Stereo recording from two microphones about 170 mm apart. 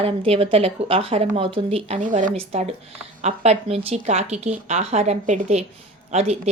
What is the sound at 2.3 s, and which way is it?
Speech, 35° right (ahead or behind).